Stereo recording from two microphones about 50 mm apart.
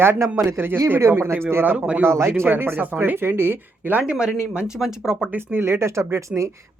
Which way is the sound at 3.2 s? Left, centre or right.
Right.